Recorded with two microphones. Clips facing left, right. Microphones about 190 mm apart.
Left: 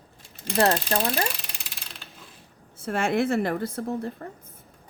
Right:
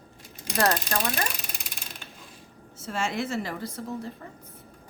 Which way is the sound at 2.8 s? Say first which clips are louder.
Left 6 dB; 55° left (ahead or behind).